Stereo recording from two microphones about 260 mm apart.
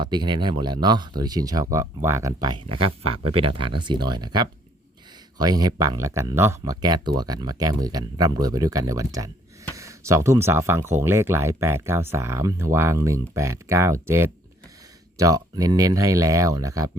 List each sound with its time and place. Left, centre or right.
0.0 s speech: centre